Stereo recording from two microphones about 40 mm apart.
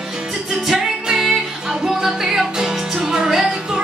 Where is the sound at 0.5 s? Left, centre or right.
Centre.